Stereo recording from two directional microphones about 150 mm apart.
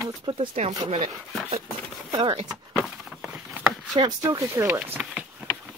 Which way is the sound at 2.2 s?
30° right (ahead or behind).